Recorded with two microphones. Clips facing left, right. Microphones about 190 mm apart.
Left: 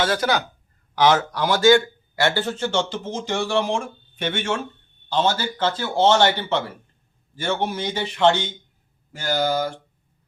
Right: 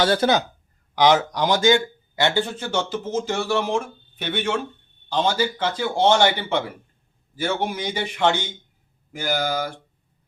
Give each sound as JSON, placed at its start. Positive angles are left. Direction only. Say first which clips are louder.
{"t": 0.0, "sound": "speech", "louder": "right 3 dB", "side_deg": -30}
{"t": 0.9, "sound": "a man's voice", "louder": "right 1 dB", "side_deg": -15}
{"t": 5.1, "sound": "a man's voice", "louder": "even", "side_deg": -10}